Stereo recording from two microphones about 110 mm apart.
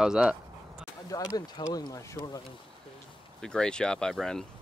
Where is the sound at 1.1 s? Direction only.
35° left (ahead or behind).